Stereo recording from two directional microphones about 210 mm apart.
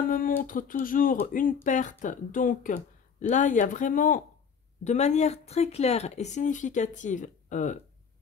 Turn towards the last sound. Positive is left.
turn(degrees=35)  # may be behind; listen again after turning